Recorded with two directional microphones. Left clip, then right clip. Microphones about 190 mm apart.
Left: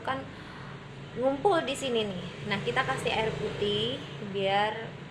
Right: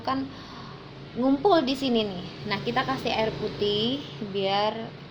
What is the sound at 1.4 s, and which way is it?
A woman's voice, 55° right (ahead or behind).